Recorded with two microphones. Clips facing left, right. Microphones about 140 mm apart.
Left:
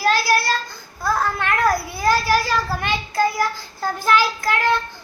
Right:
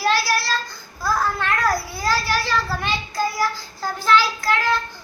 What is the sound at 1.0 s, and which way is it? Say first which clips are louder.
Babbling: left 1 dB; 55° left (ahead or behind).